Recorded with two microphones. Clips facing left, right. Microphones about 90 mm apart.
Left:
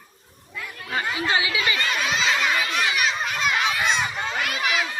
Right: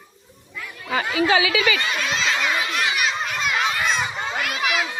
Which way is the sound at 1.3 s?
90° right.